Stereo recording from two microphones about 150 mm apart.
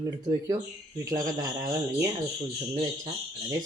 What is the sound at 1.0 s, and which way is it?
Speech, 25° right (ahead or behind).